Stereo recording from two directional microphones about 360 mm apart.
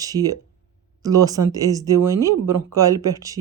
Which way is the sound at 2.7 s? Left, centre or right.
Centre.